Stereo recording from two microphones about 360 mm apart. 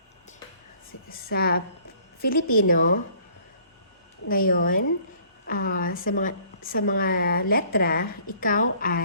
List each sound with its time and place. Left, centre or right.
1.1 s a woman's voice: left
4.3 s a woman's voice: left